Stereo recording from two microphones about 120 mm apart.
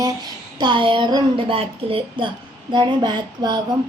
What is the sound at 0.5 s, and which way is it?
Speech, 40° right (ahead or behind).